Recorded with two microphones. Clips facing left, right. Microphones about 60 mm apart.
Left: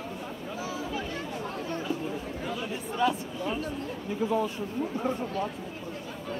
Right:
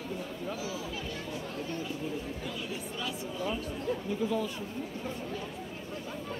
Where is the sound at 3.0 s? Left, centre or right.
Left.